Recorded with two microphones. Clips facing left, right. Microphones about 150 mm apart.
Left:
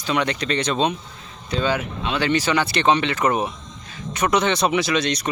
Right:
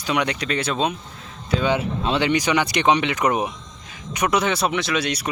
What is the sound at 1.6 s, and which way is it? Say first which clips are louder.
Speech: right 2 dB; 25° right (ahead or behind).